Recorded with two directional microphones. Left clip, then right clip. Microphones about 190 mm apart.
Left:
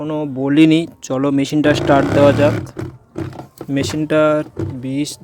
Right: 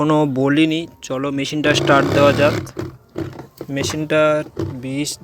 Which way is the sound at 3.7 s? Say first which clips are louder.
Left 2 dB; 35° left (ahead or behind).